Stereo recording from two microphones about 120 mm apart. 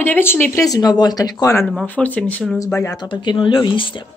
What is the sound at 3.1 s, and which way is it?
Speech, 40° left (ahead or behind).